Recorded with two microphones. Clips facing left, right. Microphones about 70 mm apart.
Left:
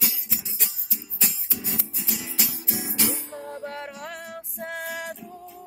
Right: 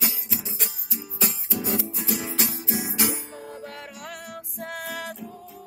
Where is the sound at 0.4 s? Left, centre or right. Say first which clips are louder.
Right 4 dB; right.